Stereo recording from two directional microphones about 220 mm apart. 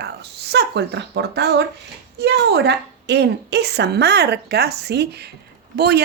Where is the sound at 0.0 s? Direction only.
50° right (ahead or behind).